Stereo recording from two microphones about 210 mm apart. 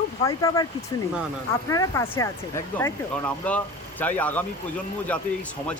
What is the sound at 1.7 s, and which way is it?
Speech, 15° left (ahead or behind).